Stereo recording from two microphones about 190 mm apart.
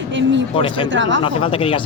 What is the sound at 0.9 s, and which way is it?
Speech, 75° right (ahead or behind).